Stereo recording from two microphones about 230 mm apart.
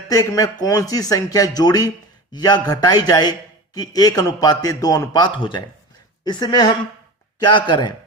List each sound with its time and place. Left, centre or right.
0.1 s a man's voice: centre